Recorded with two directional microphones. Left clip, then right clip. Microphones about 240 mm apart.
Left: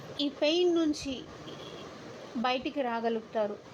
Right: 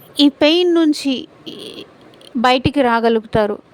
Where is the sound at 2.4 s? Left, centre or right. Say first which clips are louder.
Right 17 dB; right.